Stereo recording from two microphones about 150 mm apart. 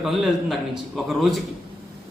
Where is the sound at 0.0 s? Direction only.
Centre (ahead or behind).